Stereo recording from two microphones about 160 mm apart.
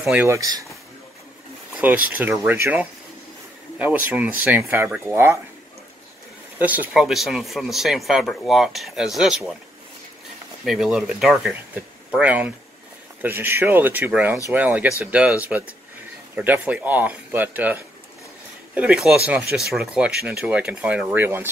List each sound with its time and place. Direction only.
0.0 s speech: 10° right (ahead or behind)
0.3 s speech: 20° right (ahead or behind)
1.8 s speech: 10° right (ahead or behind)
6.6 s speech: 10° right (ahead or behind)
10.6 s speech: centre (ahead or behind)